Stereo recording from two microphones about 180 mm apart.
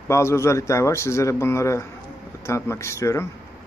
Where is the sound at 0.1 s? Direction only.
15° left (ahead or behind).